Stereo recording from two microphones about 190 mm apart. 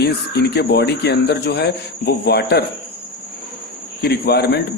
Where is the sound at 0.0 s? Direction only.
60° left (ahead or behind).